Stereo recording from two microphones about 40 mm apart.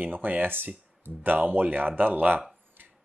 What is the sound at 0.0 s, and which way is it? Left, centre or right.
Speech, right.